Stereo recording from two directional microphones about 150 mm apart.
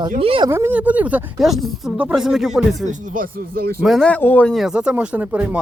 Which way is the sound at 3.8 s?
Centre (ahead or behind).